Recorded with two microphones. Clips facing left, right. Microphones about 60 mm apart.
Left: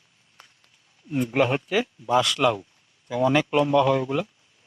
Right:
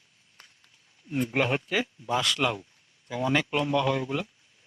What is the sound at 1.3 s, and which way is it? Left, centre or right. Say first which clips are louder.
Speech: left 5 dB; centre.